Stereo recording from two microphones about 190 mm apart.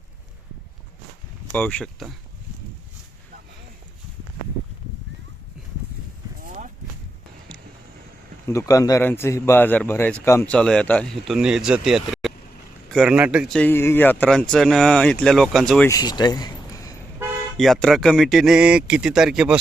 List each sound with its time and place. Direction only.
1.5 s speech: 5° left (ahead or behind)
6.4 s a sound: 40° right (ahead or behind)
8.4 s a man's voice: 15° left (ahead or behind); by 13.6 s 5° right (ahead or behind)
13.6 s speech: 10° left (ahead or behind)
15.9 s a sound: 20° left (ahead or behind)
17.6 s speech: centre (ahead or behind)